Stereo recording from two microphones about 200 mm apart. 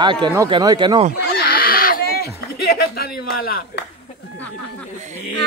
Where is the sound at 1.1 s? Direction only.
50° left (ahead or behind).